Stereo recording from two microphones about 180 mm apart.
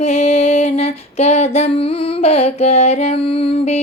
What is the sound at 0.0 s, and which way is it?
Female singing, 35° left (ahead or behind).